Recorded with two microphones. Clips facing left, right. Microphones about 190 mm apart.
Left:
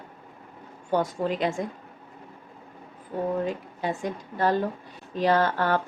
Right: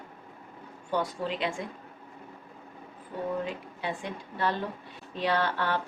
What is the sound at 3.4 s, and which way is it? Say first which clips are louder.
Speech: left 5 dB; 45° left (ahead or behind).